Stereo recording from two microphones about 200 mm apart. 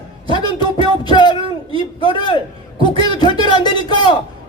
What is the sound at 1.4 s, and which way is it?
Speech, 25° right (ahead or behind).